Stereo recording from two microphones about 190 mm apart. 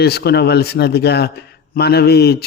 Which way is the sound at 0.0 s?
60° left (ahead or behind).